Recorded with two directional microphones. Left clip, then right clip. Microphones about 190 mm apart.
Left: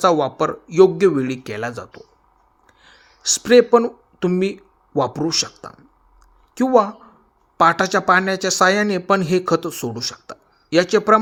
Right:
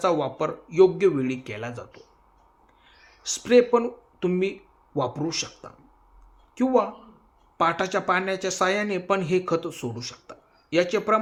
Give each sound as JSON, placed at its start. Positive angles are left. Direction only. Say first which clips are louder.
{"t": 0.0, "sound": "a woman's voice", "louder": "left 7 dB", "side_deg": 45}